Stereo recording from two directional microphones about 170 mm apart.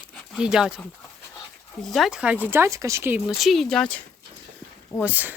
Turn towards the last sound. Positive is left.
turn(degrees=-10)  # may be behind; listen again after turning